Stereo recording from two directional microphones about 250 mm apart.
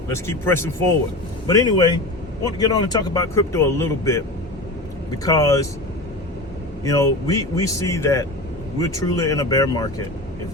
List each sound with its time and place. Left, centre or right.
0.1 s speech: centre
5.2 s speech: centre
6.8 s speech: centre